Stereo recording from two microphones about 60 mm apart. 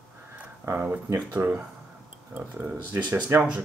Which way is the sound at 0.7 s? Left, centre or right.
Right.